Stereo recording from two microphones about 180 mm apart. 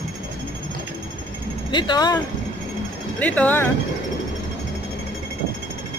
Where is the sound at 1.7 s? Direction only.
25° left (ahead or behind).